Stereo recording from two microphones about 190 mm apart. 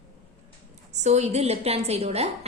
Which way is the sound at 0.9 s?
35° right (ahead or behind).